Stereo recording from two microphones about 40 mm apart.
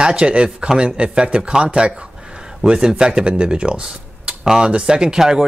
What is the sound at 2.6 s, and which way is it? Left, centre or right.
Speech, centre.